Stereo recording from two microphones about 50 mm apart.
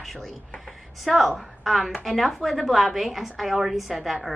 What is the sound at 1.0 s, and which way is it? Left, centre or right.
A woman's voice, centre.